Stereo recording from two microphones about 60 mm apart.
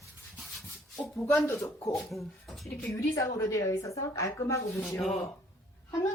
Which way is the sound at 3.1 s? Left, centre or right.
Left.